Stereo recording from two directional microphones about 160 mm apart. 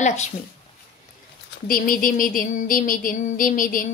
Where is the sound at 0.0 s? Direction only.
45° left (ahead or behind).